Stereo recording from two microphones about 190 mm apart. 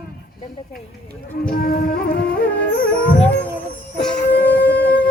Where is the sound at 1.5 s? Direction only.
55° left (ahead or behind).